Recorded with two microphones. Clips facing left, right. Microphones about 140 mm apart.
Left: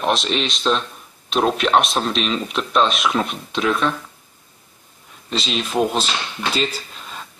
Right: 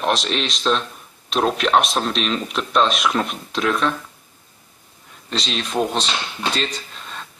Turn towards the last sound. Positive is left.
turn(degrees=5)  # may be behind; listen again after turning